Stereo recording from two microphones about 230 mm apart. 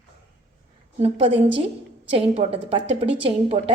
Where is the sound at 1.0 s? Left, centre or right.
Right.